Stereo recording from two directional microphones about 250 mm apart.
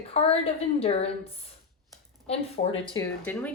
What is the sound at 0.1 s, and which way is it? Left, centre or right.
A woman's voice, left.